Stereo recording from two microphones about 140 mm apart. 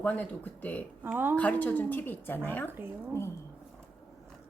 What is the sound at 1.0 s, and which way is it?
Speech, 15° right (ahead or behind).